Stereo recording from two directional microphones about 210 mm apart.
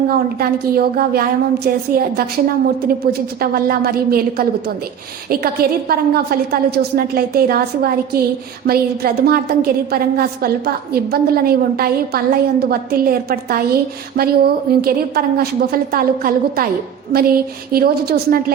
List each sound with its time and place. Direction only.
0.1 s a woman's voice: 45° right (ahead or behind)